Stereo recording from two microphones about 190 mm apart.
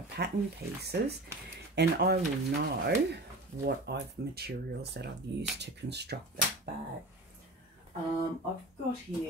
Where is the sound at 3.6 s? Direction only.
60° right (ahead or behind).